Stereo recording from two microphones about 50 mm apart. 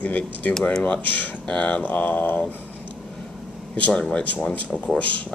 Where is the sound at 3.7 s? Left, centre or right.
Left.